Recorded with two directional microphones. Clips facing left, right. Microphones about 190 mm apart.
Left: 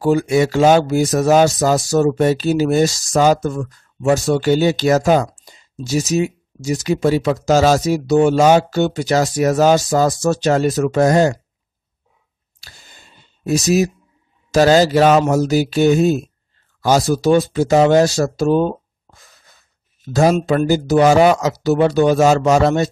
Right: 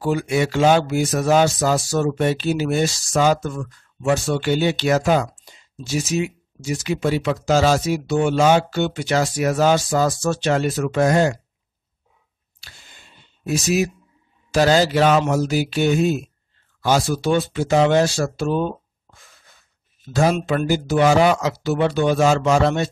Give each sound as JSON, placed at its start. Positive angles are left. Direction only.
{"t": 0.0, "sound": "speech", "side_deg": 40}
{"t": 12.5, "sound": "a sound", "side_deg": 40}
{"t": 14.5, "sound": "speech", "side_deg": 40}